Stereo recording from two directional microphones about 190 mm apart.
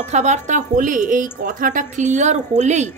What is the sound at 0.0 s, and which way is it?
A woman's voice, 35° right (ahead or behind).